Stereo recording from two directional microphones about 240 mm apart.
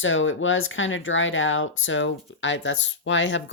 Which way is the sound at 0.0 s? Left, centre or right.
Left.